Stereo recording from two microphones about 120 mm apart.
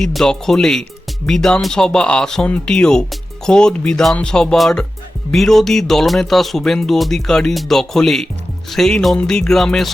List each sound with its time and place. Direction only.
0.0 s speech: 5° left (ahead or behind)